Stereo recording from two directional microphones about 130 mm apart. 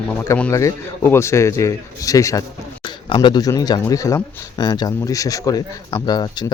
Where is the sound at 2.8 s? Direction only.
35° left (ahead or behind).